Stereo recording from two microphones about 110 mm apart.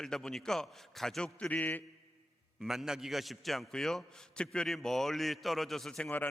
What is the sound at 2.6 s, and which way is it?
A man's voice, 5° right (ahead or behind).